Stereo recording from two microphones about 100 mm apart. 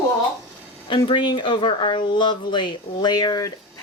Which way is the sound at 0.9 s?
55° left (ahead or behind).